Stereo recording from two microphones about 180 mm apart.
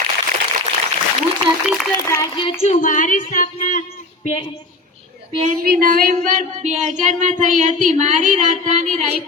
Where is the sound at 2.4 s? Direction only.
30° left (ahead or behind); by 3.8 s 45° left (ahead or behind).